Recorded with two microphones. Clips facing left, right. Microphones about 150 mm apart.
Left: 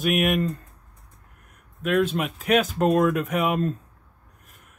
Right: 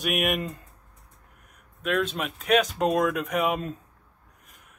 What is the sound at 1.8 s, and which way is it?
Speech, 5° left (ahead or behind).